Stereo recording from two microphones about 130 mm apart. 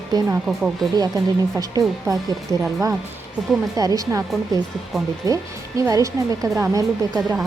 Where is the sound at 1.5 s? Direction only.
25° right (ahead or behind).